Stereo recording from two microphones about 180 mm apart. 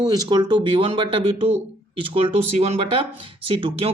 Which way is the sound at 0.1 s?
20° right (ahead or behind).